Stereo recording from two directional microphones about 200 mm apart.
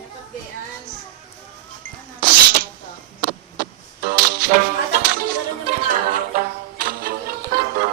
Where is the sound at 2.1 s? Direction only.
45° right (ahead or behind).